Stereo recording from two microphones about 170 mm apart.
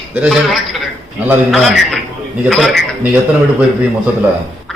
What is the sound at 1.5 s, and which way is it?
A man's voice, centre (ahead or behind).